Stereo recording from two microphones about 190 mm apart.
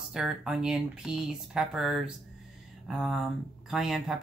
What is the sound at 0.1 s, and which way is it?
Speech, 5° right (ahead or behind).